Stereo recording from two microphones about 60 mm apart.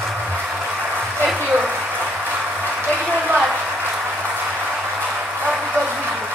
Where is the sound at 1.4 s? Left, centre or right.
Right.